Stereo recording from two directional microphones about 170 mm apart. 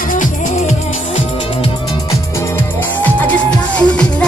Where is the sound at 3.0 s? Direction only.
10° left (ahead or behind).